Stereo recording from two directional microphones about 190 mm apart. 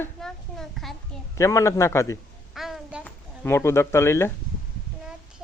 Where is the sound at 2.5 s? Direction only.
Centre (ahead or behind).